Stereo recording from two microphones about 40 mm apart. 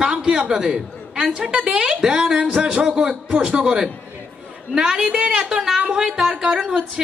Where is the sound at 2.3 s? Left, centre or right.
Right.